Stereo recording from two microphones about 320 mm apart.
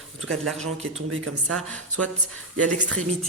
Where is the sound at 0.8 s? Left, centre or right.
Right.